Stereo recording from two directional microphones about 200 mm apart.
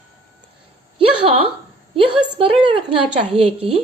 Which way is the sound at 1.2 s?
30° right (ahead or behind).